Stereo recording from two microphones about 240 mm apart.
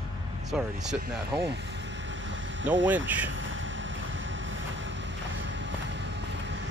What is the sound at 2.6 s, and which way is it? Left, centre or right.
Speech, right.